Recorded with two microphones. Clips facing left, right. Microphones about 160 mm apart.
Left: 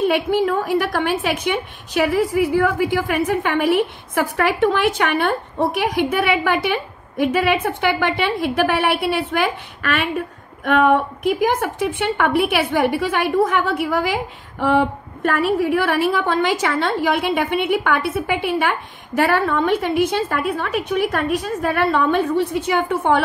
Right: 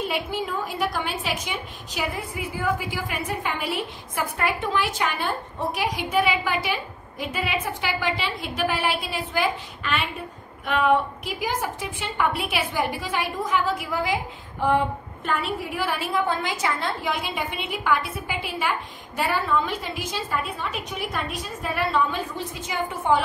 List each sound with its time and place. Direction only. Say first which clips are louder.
0.1 s a woman's voice: left 10 dB; 65° left (ahead or behind)